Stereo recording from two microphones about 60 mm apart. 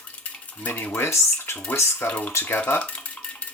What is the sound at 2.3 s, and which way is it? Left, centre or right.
Speech, left.